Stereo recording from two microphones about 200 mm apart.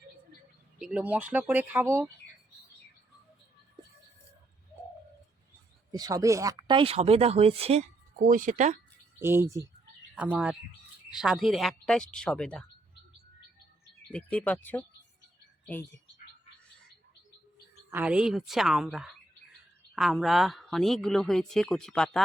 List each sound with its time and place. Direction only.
0.8 s speech: 5° right (ahead or behind)
5.9 s speech: 20° right (ahead or behind); by 8.8 s 35° right (ahead or behind)
9.2 s speech: 10° right (ahead or behind); by 12.6 s 5° left (ahead or behind)
14.1 s speech: 5° left (ahead or behind)
17.9 s speech: 5° right (ahead or behind)